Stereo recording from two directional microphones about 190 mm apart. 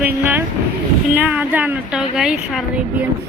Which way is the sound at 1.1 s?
10° right (ahead or behind).